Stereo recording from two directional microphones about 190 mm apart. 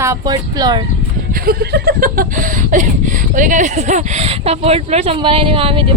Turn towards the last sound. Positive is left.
turn(degrees=-30)  # may be behind; listen again after turning